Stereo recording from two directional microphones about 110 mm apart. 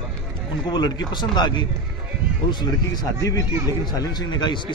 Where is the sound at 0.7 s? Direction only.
40° left (ahead or behind).